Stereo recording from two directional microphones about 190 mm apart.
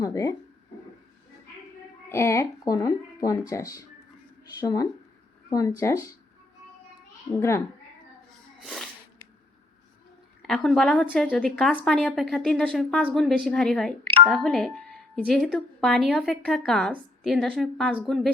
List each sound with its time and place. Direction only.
0.0 s speech: 15° left (ahead or behind)
2.0 s speech: 15° left (ahead or behind)
7.3 s speech: 15° left (ahead or behind)
8.6 s sneeze: centre (ahead or behind)
10.4 s speech: 5° left (ahead or behind)